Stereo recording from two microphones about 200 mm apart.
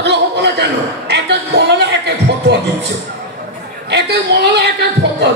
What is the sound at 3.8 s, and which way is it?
A man's voice, 55° right (ahead or behind).